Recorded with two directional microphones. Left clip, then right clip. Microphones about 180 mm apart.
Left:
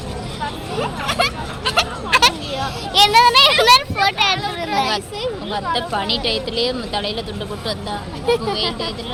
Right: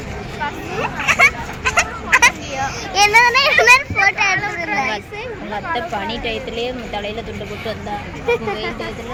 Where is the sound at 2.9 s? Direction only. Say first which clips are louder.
Left 1 dB; centre (ahead or behind).